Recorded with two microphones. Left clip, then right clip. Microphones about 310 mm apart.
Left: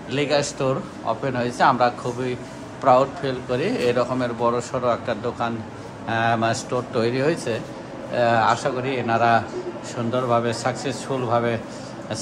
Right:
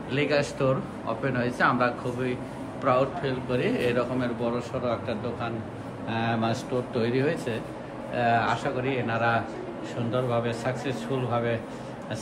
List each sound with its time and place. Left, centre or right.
0.1 s a man's voice: centre